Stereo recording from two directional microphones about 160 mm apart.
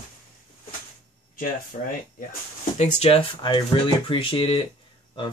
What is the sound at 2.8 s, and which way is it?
Speech, 45° left (ahead or behind).